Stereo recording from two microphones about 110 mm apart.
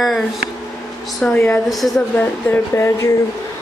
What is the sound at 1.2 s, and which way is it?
Speech, 10° left (ahead or behind).